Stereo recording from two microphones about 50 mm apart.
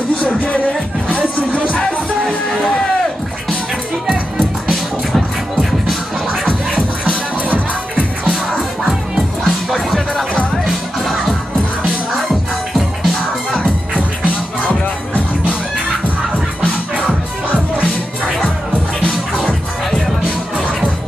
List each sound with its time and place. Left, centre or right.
2.2 s music: centre
4.1 s music: centre
6.4 s scratching: centre
7.4 s music: left
9.4 s music: centre
12.7 s music: centre